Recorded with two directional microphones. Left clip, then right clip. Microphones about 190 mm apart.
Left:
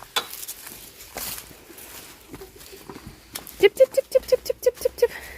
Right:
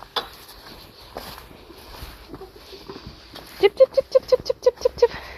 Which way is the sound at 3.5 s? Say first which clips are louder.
Right 1 dB; 40° left (ahead or behind).